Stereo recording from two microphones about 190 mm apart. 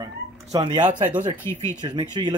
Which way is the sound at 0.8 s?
40° right (ahead or behind).